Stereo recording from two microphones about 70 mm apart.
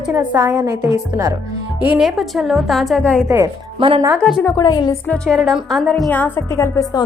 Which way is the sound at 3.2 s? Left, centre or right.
Right.